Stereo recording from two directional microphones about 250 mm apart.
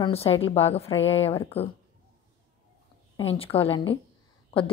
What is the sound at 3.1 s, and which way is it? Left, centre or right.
Speech, left.